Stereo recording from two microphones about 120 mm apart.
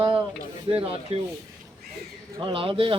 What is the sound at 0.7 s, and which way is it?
Speech, 50° right (ahead or behind).